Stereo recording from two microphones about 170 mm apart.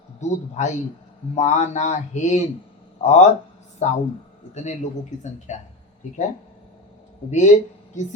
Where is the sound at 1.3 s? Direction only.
45° left (ahead or behind).